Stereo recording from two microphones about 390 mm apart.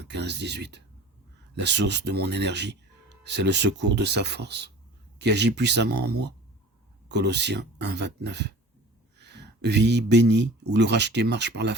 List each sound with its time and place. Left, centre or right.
0.0 s speech: right